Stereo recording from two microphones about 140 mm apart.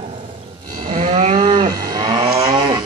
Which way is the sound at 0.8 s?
55° right (ahead or behind).